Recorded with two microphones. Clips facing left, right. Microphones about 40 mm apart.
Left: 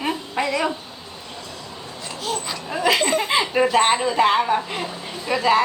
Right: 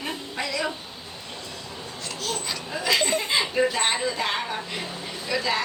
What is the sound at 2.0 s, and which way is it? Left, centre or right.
Babbling, centre.